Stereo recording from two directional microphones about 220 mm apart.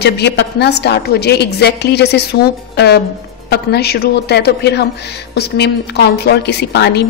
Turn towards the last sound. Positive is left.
turn(degrees=50)  # may be behind; listen again after turning